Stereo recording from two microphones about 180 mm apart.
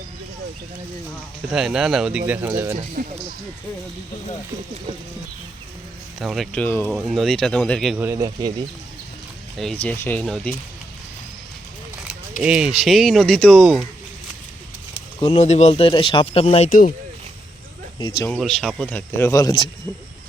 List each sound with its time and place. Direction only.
1.5 s speech: 5° right (ahead or behind)
2.7 s speech: 45° right (ahead or behind)
6.1 s speech: centre (ahead or behind)
7.0 s speech: centre (ahead or behind)
7.9 s speech: 15° right (ahead or behind)
9.6 s speech: 5° left (ahead or behind)
12.4 s speech: 5° right (ahead or behind)
15.4 s speech: 40° left (ahead or behind)
16.6 s speech: 50° left (ahead or behind)
18.3 s speech: centre (ahead or behind); by 19.7 s 20° left (ahead or behind)